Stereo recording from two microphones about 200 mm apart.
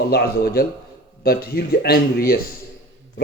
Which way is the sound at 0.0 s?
50° left (ahead or behind).